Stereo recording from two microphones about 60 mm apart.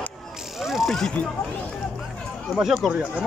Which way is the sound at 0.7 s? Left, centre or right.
Centre.